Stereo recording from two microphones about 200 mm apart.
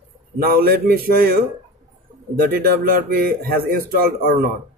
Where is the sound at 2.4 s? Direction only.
50° right (ahead or behind).